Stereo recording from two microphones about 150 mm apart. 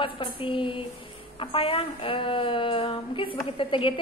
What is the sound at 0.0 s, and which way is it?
A woman's voice, 35° left (ahead or behind).